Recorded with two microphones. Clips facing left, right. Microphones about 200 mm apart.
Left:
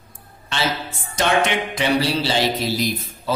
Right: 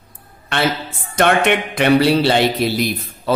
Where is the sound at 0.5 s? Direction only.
60° right (ahead or behind).